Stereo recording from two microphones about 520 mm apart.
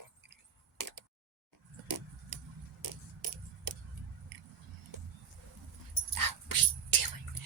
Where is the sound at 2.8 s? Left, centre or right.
Right.